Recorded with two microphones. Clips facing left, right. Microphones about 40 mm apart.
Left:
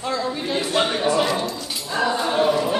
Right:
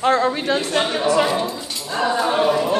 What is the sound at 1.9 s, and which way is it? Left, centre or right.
Dog, centre.